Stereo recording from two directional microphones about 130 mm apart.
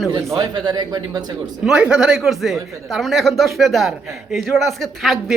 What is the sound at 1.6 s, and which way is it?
Speech, 5° right (ahead or behind).